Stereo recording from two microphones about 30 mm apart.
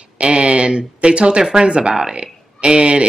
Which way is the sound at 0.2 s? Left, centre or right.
Right.